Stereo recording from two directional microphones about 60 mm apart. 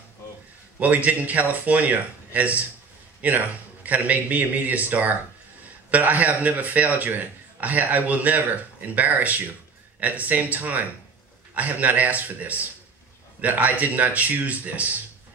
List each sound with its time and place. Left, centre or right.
0.7 s a man's voice: right